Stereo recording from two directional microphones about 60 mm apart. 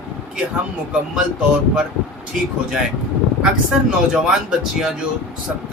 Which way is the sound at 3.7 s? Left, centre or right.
Centre.